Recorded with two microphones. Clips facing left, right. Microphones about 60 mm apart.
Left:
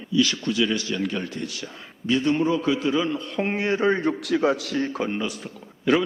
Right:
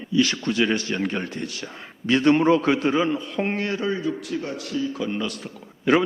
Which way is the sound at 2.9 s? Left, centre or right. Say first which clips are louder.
Right 1 dB; right.